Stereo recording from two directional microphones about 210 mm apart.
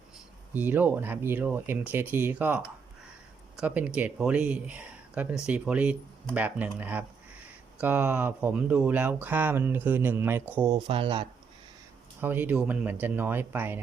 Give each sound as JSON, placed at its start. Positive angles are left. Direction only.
{"t": 0.5, "sound": "speech", "side_deg": -10}
{"t": 10.8, "sound": "speech", "side_deg": -25}
{"t": 12.2, "sound": "speech", "side_deg": -10}